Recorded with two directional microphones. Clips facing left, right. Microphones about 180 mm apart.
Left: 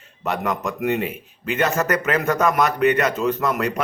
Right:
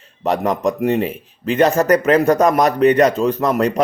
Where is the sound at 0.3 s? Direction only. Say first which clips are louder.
Right 7 dB; 35° right (ahead or behind).